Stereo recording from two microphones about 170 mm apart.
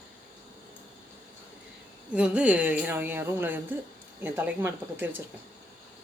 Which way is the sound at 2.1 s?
5° right (ahead or behind).